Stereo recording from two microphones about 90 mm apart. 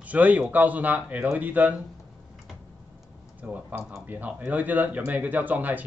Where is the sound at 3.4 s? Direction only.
20° right (ahead or behind).